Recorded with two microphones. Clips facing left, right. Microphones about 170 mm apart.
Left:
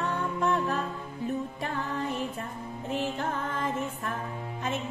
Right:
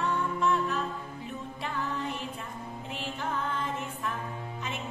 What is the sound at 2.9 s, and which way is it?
Music, 45° left (ahead or behind).